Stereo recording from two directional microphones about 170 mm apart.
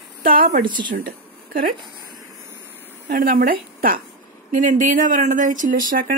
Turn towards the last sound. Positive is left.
turn(degrees=-55)  # may be behind; listen again after turning